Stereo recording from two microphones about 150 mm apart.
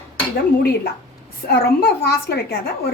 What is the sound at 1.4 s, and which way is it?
Speech, 90° left.